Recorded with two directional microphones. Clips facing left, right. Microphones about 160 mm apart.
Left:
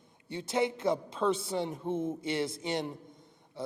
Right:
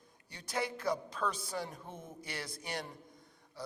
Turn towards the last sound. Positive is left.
turn(degrees=25)  # may be behind; listen again after turning